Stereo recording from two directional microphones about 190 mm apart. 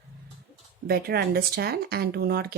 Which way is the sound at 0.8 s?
55° right (ahead or behind).